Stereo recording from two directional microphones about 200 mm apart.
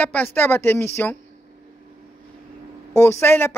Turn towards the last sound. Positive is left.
turn(degrees=10)  # may be behind; listen again after turning